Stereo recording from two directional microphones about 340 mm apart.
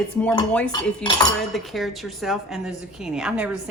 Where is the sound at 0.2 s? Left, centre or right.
Centre.